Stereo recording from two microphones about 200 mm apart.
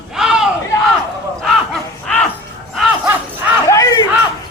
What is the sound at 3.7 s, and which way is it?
Crowd, 15° left (ahead or behind).